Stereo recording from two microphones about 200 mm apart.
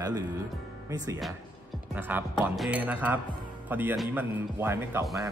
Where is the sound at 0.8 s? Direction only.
15° right (ahead or behind).